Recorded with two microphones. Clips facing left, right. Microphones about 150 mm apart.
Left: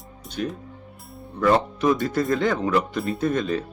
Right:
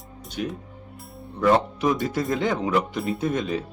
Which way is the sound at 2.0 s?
10° right (ahead or behind).